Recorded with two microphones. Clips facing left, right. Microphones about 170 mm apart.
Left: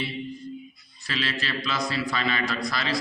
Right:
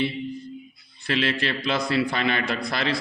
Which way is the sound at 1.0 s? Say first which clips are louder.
Right 6 dB; 55° right (ahead or behind).